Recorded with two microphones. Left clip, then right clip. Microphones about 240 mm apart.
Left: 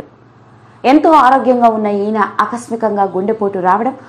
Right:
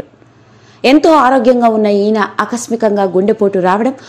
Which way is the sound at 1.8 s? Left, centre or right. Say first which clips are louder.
Right 3 dB; right.